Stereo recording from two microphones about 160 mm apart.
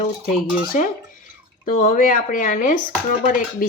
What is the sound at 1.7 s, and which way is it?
A woman's voice, 60° left (ahead or behind).